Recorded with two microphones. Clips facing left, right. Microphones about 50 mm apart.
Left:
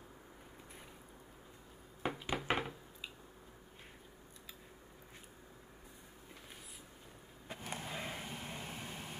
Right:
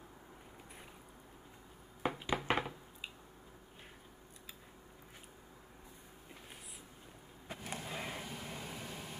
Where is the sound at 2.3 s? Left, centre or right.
Centre.